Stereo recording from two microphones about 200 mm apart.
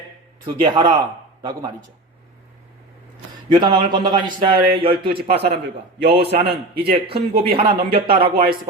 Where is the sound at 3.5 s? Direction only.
20° right (ahead or behind).